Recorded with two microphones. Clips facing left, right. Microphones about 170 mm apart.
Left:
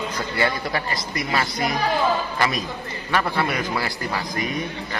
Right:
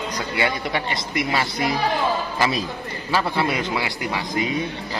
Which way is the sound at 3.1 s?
25° right (ahead or behind).